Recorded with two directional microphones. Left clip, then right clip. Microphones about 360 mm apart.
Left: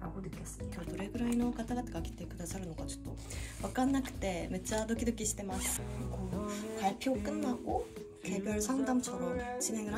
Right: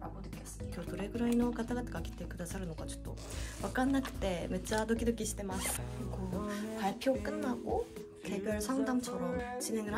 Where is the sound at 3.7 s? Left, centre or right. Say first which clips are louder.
Even; centre.